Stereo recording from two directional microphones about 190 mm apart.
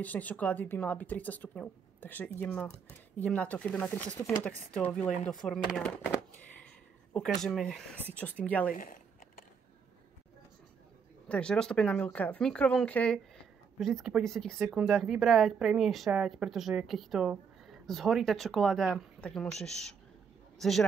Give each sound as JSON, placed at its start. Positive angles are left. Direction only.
{"t": 0.0, "sound": "speech", "side_deg": 10}
{"t": 7.2, "sound": "speech", "side_deg": 0}
{"t": 8.7, "sound": "speech", "side_deg": 45}
{"t": 11.2, "sound": "speech", "side_deg": 5}